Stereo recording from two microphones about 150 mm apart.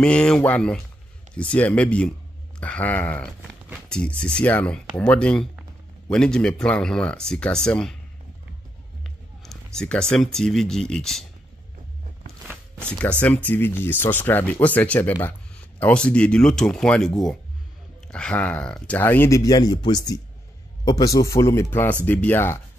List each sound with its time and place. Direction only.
0.0 s speech: 5° left (ahead or behind)
9.8 s speech: 5° left (ahead or behind)
13.0 s speech: 10° left (ahead or behind)